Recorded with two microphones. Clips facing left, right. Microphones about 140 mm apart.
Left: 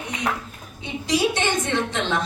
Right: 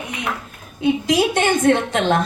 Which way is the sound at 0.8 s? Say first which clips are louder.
Right 6 dB; 55° right (ahead or behind).